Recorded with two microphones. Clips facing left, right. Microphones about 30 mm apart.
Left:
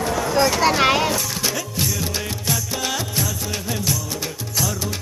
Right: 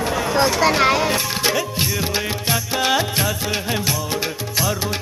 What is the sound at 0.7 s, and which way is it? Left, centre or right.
Music, right.